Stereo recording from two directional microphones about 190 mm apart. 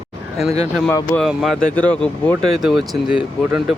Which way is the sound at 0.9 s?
15° left (ahead or behind).